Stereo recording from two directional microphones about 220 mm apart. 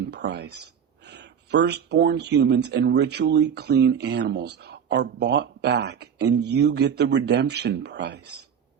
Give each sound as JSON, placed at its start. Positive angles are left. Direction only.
{"t": 0.0, "sound": "speech", "side_deg": -50}